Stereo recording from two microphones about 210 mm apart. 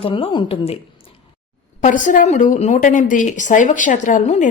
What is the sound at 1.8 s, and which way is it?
Speech, 40° left (ahead or behind).